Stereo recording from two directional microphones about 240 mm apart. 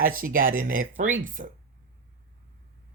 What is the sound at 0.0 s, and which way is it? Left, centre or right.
Speech, right.